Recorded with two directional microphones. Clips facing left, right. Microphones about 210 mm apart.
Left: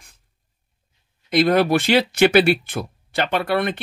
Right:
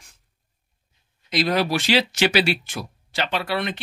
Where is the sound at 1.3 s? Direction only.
55° left (ahead or behind).